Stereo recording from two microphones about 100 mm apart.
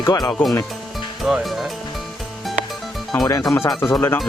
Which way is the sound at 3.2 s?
40° left (ahead or behind).